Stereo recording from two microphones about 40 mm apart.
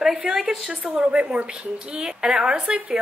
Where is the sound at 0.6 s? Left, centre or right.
Right.